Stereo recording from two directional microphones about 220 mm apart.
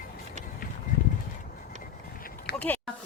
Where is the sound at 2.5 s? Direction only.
50° left (ahead or behind).